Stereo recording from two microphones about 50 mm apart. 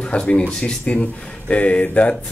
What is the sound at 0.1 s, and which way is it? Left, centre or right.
Speech, left.